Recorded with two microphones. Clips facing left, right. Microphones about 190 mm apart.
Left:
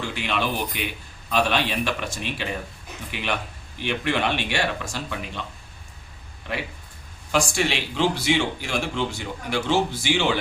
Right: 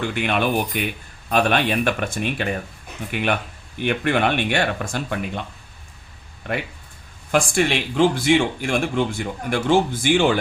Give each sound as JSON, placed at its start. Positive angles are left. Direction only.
{"t": 0.1, "sound": "a man's voice", "side_deg": -55}